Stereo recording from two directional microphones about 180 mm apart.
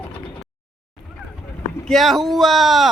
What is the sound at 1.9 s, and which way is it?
Speech, centre (ahead or behind).